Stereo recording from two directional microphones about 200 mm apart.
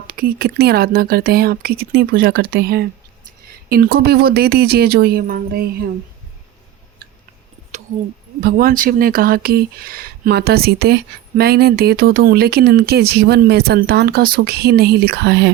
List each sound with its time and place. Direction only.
0.1 s speech: 45° right (ahead or behind)
8.4 s speech: 45° right (ahead or behind)